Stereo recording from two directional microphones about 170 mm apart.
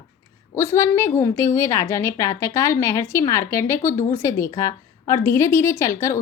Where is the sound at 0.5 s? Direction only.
15° left (ahead or behind).